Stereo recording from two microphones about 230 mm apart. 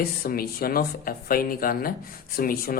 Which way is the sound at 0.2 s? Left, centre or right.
Left.